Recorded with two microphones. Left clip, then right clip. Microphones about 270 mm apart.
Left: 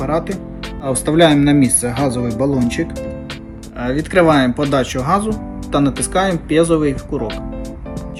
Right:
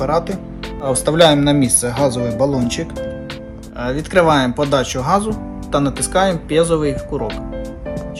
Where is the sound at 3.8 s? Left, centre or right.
Right.